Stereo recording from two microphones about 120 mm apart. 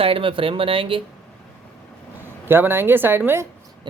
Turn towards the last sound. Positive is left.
turn(degrees=-20)  # may be behind; listen again after turning